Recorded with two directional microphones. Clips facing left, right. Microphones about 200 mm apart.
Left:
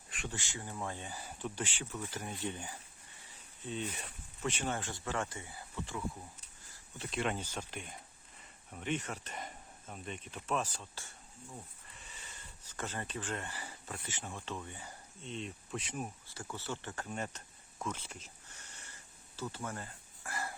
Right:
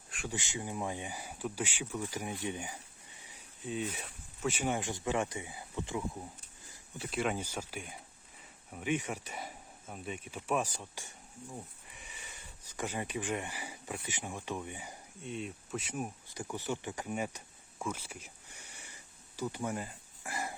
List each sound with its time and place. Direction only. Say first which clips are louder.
0.3 s speech: right 5 dB; 20° right (ahead or behind)
7.0 s speech: right 2 dB; 5° right (ahead or behind)
19.4 s a sound: right 5 dB; 15° right (ahead or behind)